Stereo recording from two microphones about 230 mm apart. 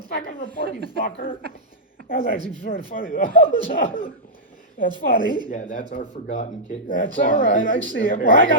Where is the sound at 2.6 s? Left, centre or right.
Left.